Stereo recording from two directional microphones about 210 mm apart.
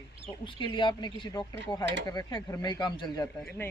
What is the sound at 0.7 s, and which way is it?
Speech, 20° left (ahead or behind).